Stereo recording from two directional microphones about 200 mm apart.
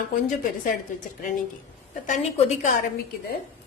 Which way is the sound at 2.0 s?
40° left (ahead or behind).